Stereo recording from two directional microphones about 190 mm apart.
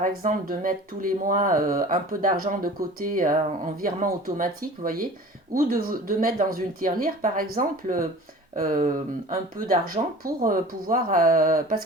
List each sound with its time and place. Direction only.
0.0 s speech: 45° right (ahead or behind)